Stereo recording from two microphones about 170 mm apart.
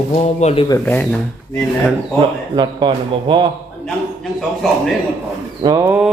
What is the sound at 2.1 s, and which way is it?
Speech, 25° right (ahead or behind).